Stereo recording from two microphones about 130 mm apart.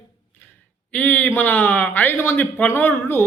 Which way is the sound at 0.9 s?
10° left (ahead or behind).